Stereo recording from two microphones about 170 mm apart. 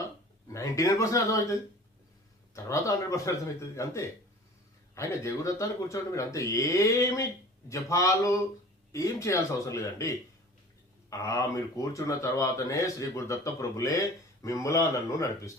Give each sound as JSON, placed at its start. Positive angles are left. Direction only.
{"t": 0.5, "sound": "speech", "side_deg": 20}
{"t": 2.6, "sound": "speech", "side_deg": 20}